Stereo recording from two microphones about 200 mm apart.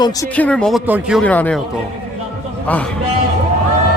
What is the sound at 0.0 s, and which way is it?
Speech, 20° left (ahead or behind).